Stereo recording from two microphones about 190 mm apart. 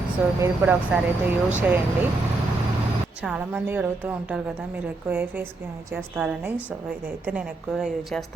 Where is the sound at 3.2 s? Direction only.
5° right (ahead or behind).